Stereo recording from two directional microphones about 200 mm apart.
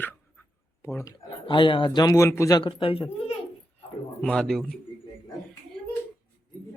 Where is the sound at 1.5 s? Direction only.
25° left (ahead or behind).